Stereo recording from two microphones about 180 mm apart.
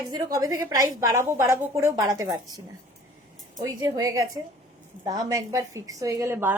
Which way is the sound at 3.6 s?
20° right (ahead or behind).